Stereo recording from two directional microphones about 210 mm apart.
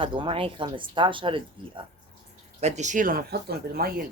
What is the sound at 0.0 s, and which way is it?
Speech, 25° right (ahead or behind).